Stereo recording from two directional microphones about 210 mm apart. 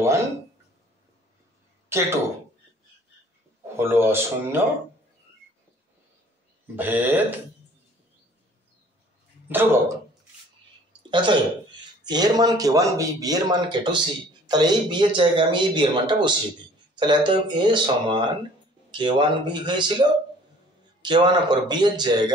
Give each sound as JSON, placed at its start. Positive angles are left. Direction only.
{"t": 0.0, "sound": "a sound", "side_deg": -15}
{"t": 1.9, "sound": "speech", "side_deg": -15}
{"t": 3.7, "sound": "a man's voice", "side_deg": -10}
{"t": 6.7, "sound": "a man's voice", "side_deg": -10}
{"t": 9.5, "sound": "a man's voice", "side_deg": -10}
{"t": 11.0, "sound": "a sound", "side_deg": -20}
{"t": 12.0, "sound": "speech", "side_deg": -20}